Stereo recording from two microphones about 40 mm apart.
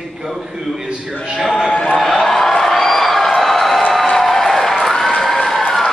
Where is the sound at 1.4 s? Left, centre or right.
Centre.